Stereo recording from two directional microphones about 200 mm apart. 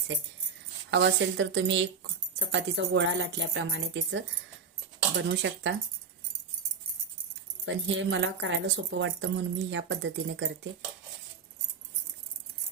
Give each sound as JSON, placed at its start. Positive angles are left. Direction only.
{"t": 0.9, "sound": "speech", "side_deg": -65}
{"t": 7.6, "sound": "speech", "side_deg": -70}